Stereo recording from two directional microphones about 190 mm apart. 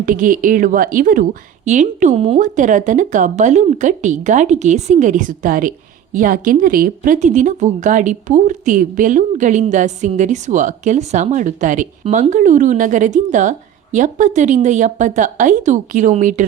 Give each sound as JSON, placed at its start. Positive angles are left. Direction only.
{"t": 0.0, "sound": "a woman's voice", "side_deg": -45}